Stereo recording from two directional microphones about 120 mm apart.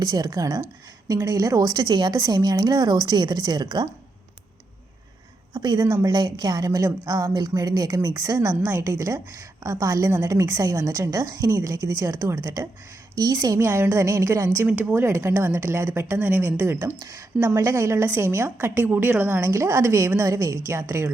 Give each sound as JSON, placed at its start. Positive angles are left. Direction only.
{"t": 0.0, "sound": "a woman's voice", "side_deg": -30}
{"t": 5.5, "sound": "a woman's voice", "side_deg": -35}
{"t": 5.8, "sound": "a woman's voice", "side_deg": -25}